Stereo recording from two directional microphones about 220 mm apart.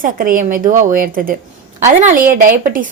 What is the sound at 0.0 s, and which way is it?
A woman's voice, 40° right (ahead or behind).